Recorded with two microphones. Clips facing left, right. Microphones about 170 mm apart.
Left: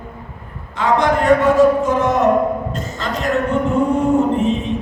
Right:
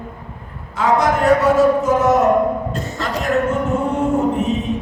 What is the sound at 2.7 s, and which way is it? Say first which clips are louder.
Speech: right 1 dB; 70° right (ahead or behind).